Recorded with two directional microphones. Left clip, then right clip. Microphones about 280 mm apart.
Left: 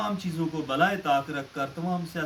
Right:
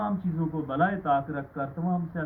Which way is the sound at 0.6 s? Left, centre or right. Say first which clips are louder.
Left 2 dB; left.